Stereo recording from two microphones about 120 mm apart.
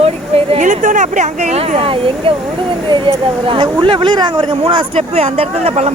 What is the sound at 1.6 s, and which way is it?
Speech, 50° right (ahead or behind).